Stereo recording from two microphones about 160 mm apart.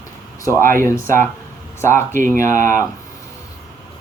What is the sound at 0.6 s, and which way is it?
Speech, 60° right (ahead or behind).